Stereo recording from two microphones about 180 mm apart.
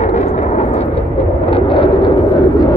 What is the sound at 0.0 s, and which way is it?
Vehicle, 40° left (ahead or behind).